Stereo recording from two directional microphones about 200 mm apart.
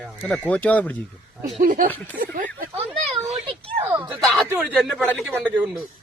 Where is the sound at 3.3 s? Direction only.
25° right (ahead or behind).